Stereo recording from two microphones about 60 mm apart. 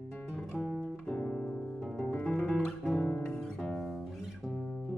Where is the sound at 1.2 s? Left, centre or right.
Left.